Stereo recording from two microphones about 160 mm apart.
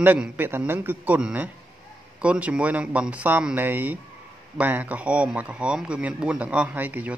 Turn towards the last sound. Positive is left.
turn(degrees=-10)  # may be behind; listen again after turning